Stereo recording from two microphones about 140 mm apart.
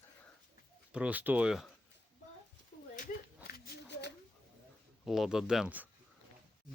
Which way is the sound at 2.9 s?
70° left (ahead or behind).